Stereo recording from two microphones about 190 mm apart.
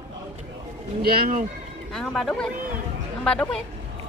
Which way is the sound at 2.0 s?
Centre (ahead or behind).